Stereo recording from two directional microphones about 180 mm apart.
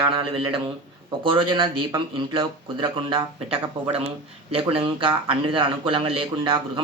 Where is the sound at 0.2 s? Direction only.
30° right (ahead or behind).